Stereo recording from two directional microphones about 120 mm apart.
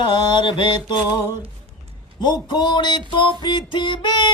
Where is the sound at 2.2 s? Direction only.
40° left (ahead or behind).